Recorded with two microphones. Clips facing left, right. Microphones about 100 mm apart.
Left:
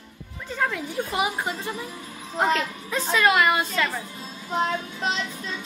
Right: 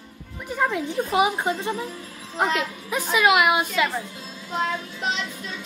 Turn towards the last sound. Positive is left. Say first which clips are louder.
# even
turn(degrees=35)  # may be behind; listen again after turning